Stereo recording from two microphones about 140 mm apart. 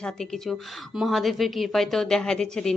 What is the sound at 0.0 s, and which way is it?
A woman's voice, 5° left (ahead or behind).